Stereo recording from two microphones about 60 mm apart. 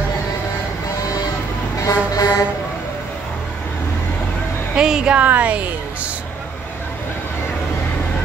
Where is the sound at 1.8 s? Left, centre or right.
Left.